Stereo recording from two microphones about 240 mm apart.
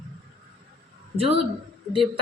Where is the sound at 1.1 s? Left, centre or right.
Right.